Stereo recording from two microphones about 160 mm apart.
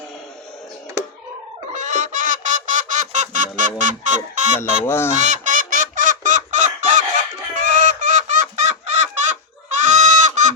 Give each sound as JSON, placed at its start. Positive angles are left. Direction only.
{"t": 1.7, "sound": "music", "side_deg": -50}
{"t": 4.9, "sound": "fowl", "side_deg": 15}
{"t": 5.1, "sound": "chicken", "side_deg": -50}